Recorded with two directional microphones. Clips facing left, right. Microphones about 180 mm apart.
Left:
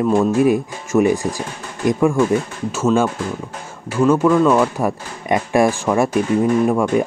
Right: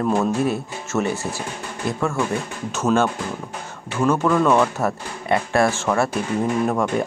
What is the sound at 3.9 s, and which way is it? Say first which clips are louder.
Speech: left 5 dB; 5° left (ahead or behind).